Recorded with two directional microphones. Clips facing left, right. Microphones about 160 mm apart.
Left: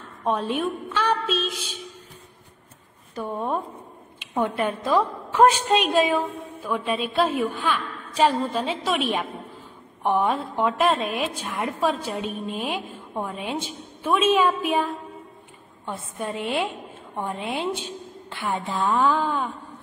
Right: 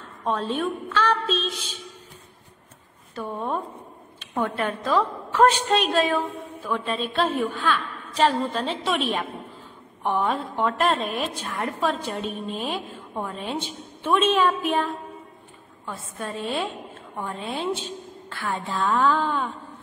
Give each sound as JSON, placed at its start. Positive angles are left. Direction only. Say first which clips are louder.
{"t": 0.2, "sound": "a woman's voice", "louder": "left 1 dB", "side_deg": 15}
{"t": 3.2, "sound": "a woman's voice", "louder": "left 1 dB", "side_deg": 10}